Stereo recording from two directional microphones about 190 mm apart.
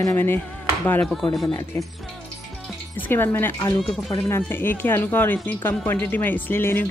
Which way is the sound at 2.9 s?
10° left (ahead or behind).